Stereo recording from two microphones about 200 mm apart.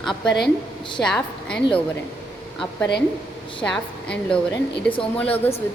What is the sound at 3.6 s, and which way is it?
A woman's voice, 5° left (ahead or behind).